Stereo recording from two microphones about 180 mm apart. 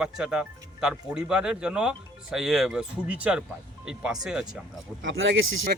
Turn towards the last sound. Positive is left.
turn(degrees=-90)